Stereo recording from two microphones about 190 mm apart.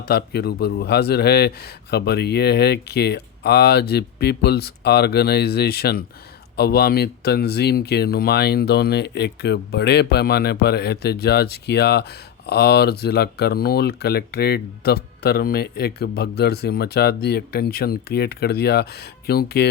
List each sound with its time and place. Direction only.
0.1 s speech: 55° left (ahead or behind)